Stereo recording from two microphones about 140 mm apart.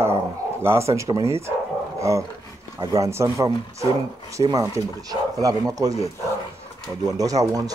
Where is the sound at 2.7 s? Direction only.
20° right (ahead or behind).